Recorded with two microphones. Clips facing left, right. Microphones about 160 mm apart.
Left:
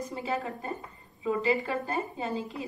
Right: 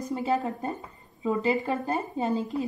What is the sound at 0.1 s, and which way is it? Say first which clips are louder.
A woman's voice: right 9 dB; 40° right (ahead or behind).